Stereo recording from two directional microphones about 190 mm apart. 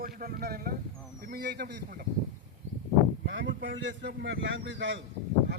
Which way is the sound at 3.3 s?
75° right (ahead or behind).